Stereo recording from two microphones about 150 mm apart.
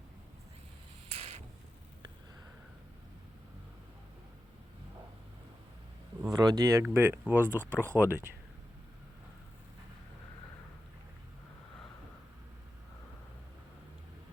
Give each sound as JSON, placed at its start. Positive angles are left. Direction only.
{"t": 1.1, "sound": "a sound", "side_deg": -45}
{"t": 6.2, "sound": "speech", "side_deg": -25}
{"t": 7.6, "sound": "speech", "side_deg": 10}
{"t": 7.9, "sound": "speech", "side_deg": -15}